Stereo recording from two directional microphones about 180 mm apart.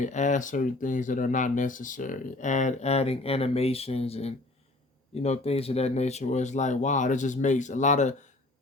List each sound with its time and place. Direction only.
0.0 s speech: 40° left (ahead or behind)